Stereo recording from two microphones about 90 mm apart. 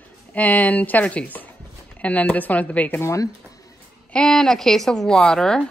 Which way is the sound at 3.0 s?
35° left (ahead or behind).